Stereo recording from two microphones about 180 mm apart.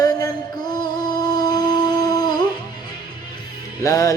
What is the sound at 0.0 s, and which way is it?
Music, 20° left (ahead or behind).